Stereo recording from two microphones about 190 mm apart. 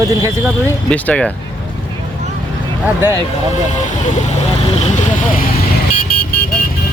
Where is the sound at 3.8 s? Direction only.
40° left (ahead or behind).